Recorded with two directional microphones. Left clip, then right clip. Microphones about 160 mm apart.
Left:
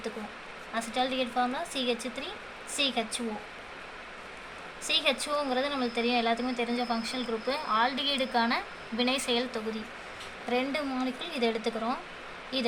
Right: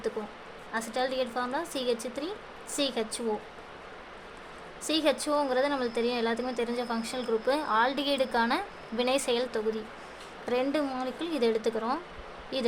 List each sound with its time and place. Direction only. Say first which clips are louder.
0.7 s a woman's voice: even; 90° right
4.9 s a woman's voice: right 1 dB; 90° right